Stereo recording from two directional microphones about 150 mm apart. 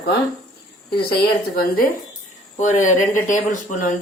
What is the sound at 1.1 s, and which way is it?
Speech, 85° left.